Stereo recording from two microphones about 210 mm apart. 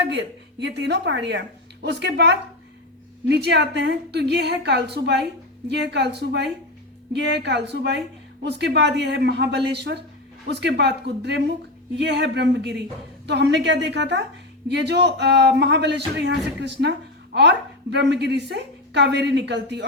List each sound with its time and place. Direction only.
0.1 s a woman's voice: 55° right (ahead or behind)
17.9 s a woman's voice: 55° right (ahead or behind)